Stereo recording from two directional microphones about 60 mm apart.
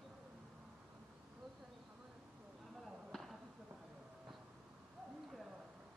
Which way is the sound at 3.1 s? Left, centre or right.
Centre.